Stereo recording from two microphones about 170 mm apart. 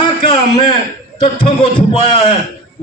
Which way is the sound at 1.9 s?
30° left (ahead or behind).